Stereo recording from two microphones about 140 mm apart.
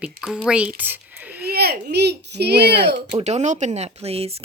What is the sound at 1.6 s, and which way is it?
Speech, 90° right.